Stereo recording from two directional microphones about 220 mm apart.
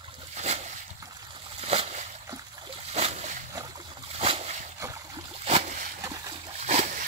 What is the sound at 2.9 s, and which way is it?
Splash, 30° right (ahead or behind).